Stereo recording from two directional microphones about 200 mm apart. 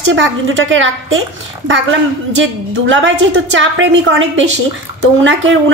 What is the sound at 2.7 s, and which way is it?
A woman's voice, 70° right (ahead or behind).